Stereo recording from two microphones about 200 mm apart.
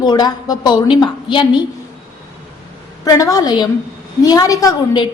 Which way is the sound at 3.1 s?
15° left (ahead or behind).